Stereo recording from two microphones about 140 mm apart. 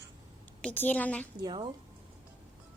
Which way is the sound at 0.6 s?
10° left (ahead or behind).